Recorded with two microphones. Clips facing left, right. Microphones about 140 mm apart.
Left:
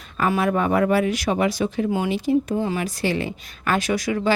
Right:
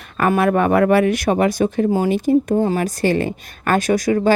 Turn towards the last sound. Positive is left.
turn(degrees=-45)  # may be behind; listen again after turning